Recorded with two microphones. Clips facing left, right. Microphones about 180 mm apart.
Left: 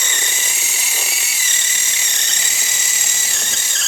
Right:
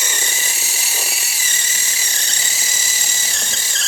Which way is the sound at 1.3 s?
40° right (ahead or behind).